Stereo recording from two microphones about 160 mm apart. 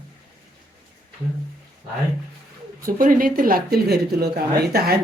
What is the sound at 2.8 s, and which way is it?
Speech, 60° right (ahead or behind).